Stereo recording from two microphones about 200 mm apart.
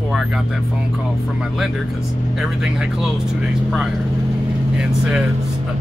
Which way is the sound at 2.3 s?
Centre (ahead or behind).